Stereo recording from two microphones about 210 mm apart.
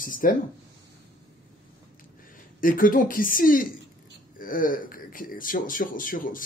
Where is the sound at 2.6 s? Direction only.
40° left (ahead or behind).